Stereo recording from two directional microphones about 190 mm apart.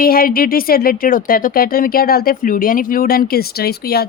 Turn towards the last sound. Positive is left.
turn(degrees=55)  # may be behind; listen again after turning